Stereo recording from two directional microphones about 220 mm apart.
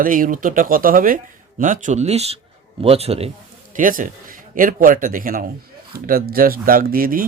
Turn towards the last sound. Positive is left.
turn(degrees=-40)  # may be behind; listen again after turning